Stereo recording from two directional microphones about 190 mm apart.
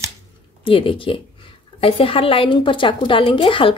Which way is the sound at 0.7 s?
30° left (ahead or behind).